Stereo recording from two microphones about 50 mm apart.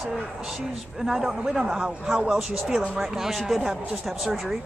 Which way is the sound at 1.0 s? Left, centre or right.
Centre.